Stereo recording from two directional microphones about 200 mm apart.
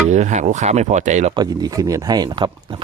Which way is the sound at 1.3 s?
20° right (ahead or behind).